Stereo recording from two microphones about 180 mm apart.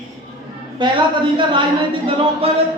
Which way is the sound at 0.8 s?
25° right (ahead or behind).